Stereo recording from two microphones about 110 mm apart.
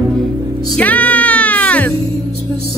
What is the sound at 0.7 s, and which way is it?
Music, 15° left (ahead or behind).